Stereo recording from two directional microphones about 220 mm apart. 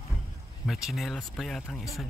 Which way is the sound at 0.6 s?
Centre (ahead or behind).